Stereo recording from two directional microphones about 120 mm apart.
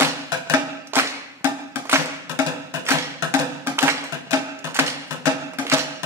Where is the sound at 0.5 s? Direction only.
20° right (ahead or behind).